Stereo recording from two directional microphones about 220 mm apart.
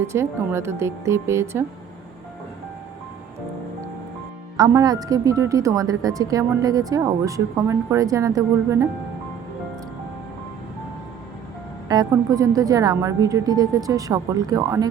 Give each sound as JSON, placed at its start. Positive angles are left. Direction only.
{"t": 0.0, "sound": "a woman's voice", "side_deg": -10}
{"t": 4.5, "sound": "a woman's voice", "side_deg": -15}
{"t": 11.9, "sound": "a woman's voice", "side_deg": -15}